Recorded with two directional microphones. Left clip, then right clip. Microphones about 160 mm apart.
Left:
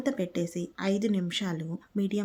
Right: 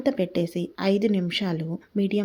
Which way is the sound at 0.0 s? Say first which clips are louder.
Right 6 dB; 10° right (ahead or behind).